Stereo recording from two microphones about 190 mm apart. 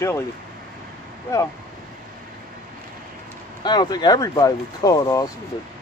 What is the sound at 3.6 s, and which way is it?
Speech, 20° left (ahead or behind).